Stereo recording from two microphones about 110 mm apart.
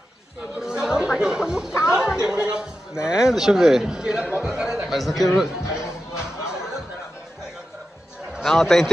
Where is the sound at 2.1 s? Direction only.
5° right (ahead or behind).